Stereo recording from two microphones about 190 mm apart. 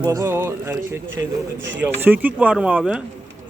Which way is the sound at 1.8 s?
10° right (ahead or behind).